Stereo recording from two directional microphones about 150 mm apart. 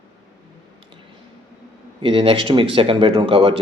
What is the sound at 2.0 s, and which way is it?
A man's voice, 40° right (ahead or behind).